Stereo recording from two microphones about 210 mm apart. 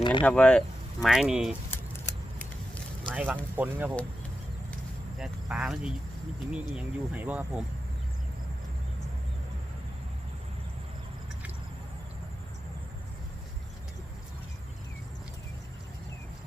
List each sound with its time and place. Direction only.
0.0 s speech: 25° left (ahead or behind)
0.3 s speech: 5° left (ahead or behind)
3.1 s speech: 5° right (ahead or behind)
5.2 s speech: 5° right (ahead or behind)